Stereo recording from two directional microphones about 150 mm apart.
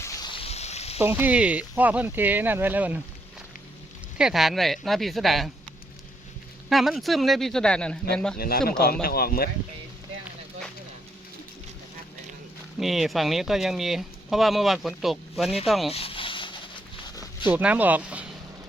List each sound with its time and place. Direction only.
0.0 s a sound: 20° left (ahead or behind)
0.3 s sizzle: 40° left (ahead or behind)
1.0 s speech: 10° right (ahead or behind)
4.2 s speech: 5° right (ahead or behind)
6.7 s speech: centre (ahead or behind)
8.4 s speech: 90° left
12.8 s speech: centre (ahead or behind)
15.9 s a sound: 40° left (ahead or behind)
17.5 s speech: 10° right (ahead or behind)